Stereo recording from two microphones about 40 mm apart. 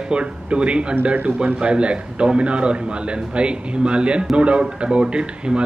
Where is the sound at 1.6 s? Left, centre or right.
Right.